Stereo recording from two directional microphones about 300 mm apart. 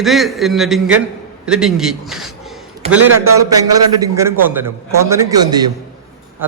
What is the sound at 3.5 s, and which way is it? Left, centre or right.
A man's voice, centre.